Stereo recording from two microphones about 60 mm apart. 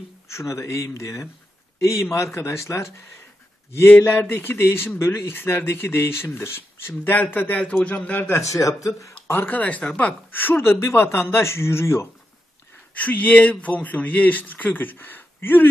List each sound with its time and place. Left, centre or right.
0.3 s a man's voice: left
4.0 s speech: left
7.5 s speech: left
8.3 s speech: left
9.5 s speech: left
12.9 s speech: left